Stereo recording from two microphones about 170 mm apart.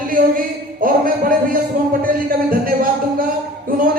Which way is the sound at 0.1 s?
55° right (ahead or behind).